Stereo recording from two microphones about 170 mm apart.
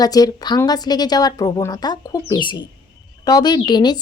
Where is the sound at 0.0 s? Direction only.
20° left (ahead or behind).